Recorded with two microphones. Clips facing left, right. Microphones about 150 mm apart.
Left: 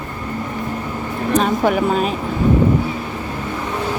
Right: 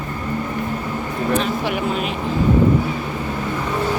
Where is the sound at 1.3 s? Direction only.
40° left (ahead or behind).